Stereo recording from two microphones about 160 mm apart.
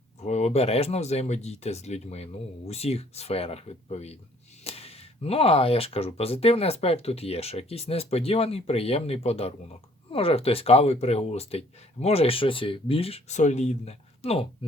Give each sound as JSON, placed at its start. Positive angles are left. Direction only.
{"t": 0.2, "sound": "speech", "side_deg": 45}